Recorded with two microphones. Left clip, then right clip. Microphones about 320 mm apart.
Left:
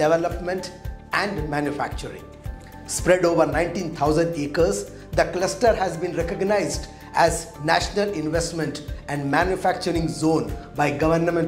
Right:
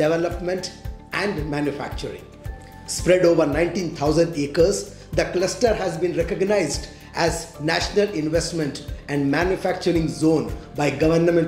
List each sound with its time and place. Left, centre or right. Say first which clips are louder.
0.0 s speech: left 1 dB; left